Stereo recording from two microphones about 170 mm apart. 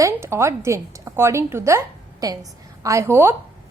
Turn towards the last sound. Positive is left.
turn(degrees=-15)  # may be behind; listen again after turning